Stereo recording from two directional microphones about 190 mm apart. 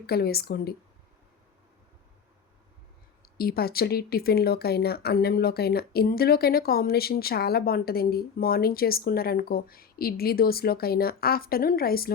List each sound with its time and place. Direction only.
0.0 s speech: 55° left (ahead or behind)
3.3 s speech: 55° left (ahead or behind)